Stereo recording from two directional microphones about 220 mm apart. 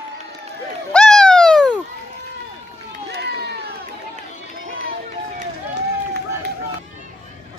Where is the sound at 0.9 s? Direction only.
5° left (ahead or behind).